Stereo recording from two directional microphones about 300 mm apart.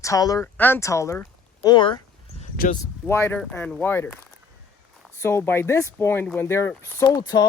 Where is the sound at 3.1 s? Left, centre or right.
Centre.